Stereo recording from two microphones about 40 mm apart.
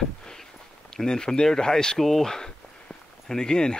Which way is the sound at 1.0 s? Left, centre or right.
Centre.